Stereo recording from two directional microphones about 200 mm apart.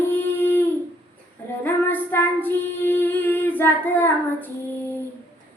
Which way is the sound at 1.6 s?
10° left (ahead or behind).